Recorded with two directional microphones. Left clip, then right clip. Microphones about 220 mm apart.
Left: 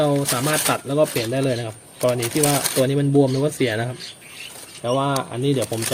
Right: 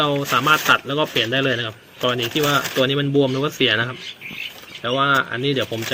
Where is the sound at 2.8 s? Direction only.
10° left (ahead or behind).